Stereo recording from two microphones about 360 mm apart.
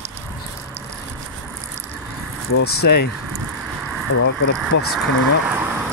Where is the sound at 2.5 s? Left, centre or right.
Left.